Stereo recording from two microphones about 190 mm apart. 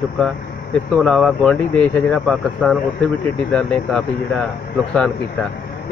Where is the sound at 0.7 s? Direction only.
5° left (ahead or behind).